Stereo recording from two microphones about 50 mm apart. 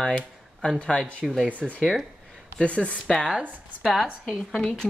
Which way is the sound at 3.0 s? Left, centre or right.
Centre.